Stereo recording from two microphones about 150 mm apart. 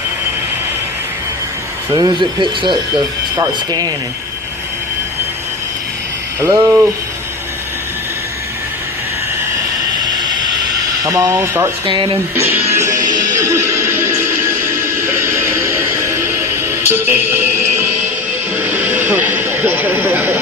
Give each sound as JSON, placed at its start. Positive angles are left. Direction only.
{"t": 1.9, "sound": "speech", "side_deg": -30}
{"t": 6.4, "sound": "speech", "side_deg": -15}
{"t": 11.0, "sound": "speech", "side_deg": -20}
{"t": 11.9, "sound": "speech", "side_deg": -35}
{"t": 12.4, "sound": "speech", "side_deg": -15}
{"t": 12.8, "sound": "music", "side_deg": -25}
{"t": 18.5, "sound": "a sound", "side_deg": -10}